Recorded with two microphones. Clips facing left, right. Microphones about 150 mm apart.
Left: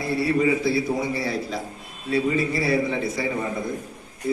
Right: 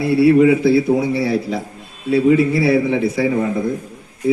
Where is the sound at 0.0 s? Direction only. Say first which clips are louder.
Right 10 dB; 65° right (ahead or behind).